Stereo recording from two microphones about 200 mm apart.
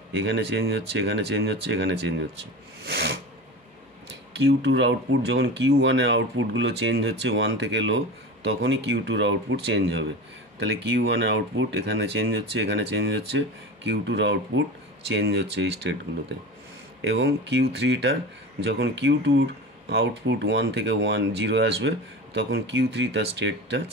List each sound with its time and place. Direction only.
0.1 s speech: 65° right (ahead or behind)
2.8 s a sound: 55° right (ahead or behind)
4.5 s speech: 65° right (ahead or behind)
17.0 s speech: 60° right (ahead or behind)